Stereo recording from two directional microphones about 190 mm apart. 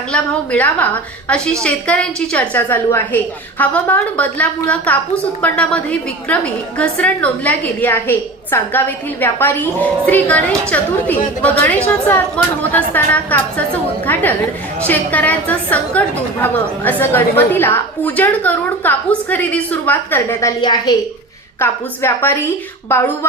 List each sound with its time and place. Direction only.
0.1 s a woman's voice: 10° left (ahead or behind)
20.6 s a woman's voice: 20° left (ahead or behind)
21.6 s a woman's voice: 10° left (ahead or behind)